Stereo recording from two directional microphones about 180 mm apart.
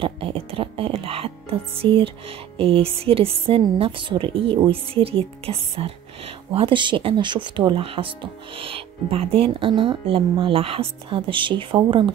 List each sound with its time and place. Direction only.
0.0 s speech: 30° right (ahead or behind)